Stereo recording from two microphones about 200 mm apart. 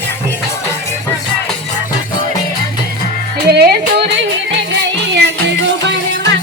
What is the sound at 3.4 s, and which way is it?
Music, 55° right (ahead or behind).